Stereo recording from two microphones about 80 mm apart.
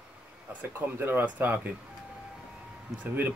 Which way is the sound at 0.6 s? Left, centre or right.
Right.